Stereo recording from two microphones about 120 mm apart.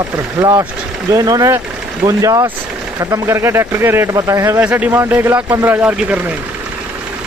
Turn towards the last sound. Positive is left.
turn(degrees=-10)  # may be behind; listen again after turning